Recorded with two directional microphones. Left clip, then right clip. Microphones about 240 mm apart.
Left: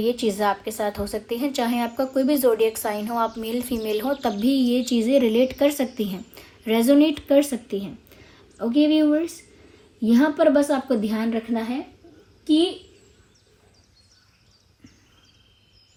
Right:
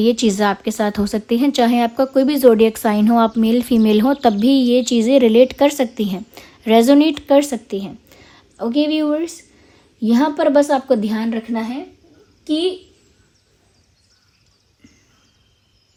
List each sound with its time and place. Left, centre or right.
0.0 s a woman's voice: right